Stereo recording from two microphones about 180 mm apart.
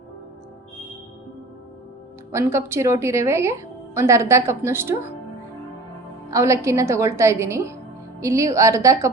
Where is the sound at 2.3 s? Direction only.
15° right (ahead or behind).